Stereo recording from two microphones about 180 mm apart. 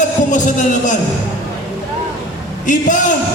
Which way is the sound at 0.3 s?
45° left (ahead or behind).